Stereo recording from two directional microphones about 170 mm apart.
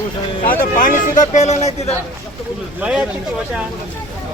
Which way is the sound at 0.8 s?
50° left (ahead or behind).